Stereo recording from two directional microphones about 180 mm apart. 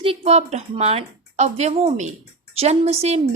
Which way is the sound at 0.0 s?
35° right (ahead or behind).